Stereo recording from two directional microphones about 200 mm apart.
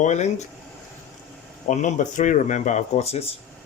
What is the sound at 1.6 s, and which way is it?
Speech, 40° left (ahead or behind).